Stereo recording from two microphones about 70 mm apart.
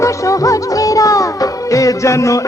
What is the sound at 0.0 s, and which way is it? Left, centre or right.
Music, left.